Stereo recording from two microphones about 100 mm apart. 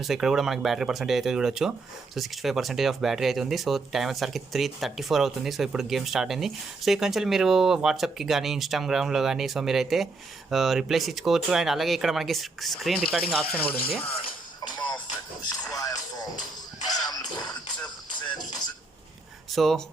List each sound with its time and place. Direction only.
0.0 s speech: 5° right (ahead or behind); by 14.1 s 10° left (ahead or behind)
15.6 s a sound: 35° left (ahead or behind)
19.5 s speech: centre (ahead or behind)